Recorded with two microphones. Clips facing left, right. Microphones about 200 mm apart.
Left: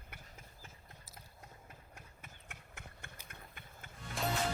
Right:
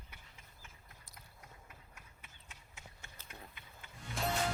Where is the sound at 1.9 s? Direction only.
50° left (ahead or behind).